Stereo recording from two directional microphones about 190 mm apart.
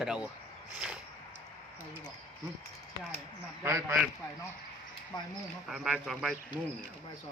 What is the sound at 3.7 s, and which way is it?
Speech, 15° right (ahead or behind).